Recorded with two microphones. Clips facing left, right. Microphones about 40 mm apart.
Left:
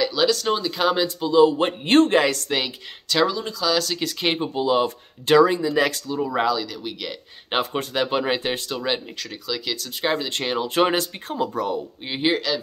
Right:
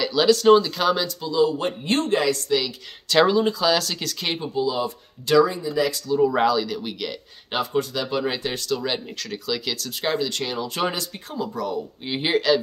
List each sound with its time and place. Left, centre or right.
0.0 s speech: centre
1.0 s speech: left
3.3 s speech: centre
3.7 s speech: centre
4.0 s speech: centre
4.6 s speech: left
5.5 s speech: left
6.1 s speech: centre
7.5 s speech: left
8.7 s speech: centre
10.1 s speech: left
12.2 s speech: centre